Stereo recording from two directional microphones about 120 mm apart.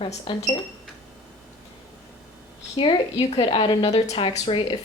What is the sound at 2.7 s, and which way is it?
Speech, 50° left (ahead or behind).